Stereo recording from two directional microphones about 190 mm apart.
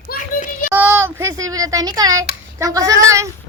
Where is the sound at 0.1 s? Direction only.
45° left (ahead or behind).